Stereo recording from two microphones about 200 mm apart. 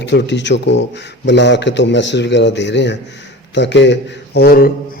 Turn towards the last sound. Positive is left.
turn(degrees=50)  # may be behind; listen again after turning